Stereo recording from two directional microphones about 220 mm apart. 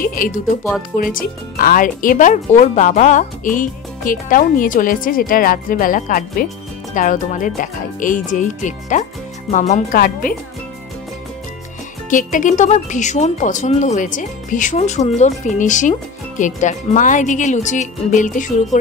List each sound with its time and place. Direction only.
0.0 s speech: 40° left (ahead or behind)
12.1 s speech: 35° left (ahead or behind)